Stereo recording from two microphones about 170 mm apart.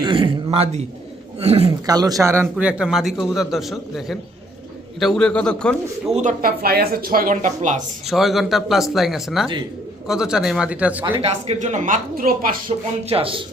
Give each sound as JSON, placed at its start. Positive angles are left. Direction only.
{"t": 0.0, "sound": "a sound", "side_deg": -30}
{"t": 1.4, "sound": "a man's voice", "side_deg": -35}
{"t": 1.9, "sound": "a man's voice", "side_deg": -20}
{"t": 6.1, "sound": "speech", "side_deg": -55}
{"t": 8.0, "sound": "a man's voice", "side_deg": 0}
{"t": 11.2, "sound": "speech", "side_deg": -40}
{"t": 13.1, "sound": "a man's voice", "side_deg": -35}